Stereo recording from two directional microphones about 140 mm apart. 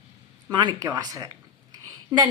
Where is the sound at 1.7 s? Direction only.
25° right (ahead or behind).